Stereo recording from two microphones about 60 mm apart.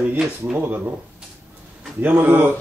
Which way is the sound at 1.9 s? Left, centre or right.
Right.